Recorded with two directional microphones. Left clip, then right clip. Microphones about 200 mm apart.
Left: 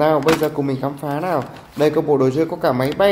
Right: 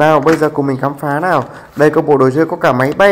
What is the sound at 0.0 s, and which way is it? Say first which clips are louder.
A man's voice: right 6 dB; 15° right (ahead or behind).